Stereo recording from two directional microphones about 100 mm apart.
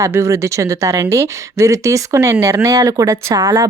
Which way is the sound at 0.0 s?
30° right (ahead or behind).